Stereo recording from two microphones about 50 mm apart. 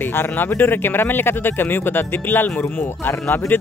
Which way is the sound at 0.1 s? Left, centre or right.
Left.